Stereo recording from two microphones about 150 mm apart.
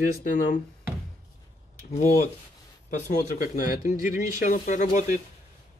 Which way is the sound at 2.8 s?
55° left (ahead or behind).